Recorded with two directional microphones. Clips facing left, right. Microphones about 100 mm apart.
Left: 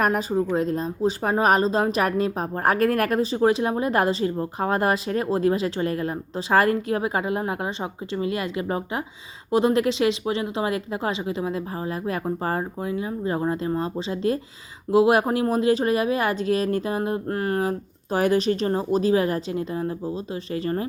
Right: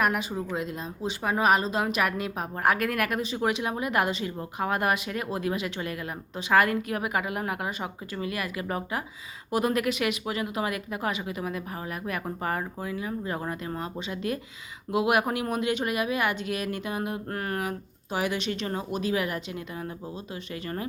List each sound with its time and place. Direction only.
0.0 s speech: 35° left (ahead or behind)
18.1 s speech: 40° left (ahead or behind)